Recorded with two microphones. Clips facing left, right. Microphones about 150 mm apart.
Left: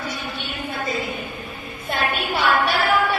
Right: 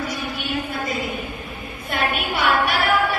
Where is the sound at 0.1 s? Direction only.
25° left (ahead or behind).